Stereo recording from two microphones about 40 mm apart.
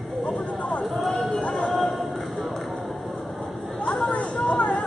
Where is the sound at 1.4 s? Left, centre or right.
Left.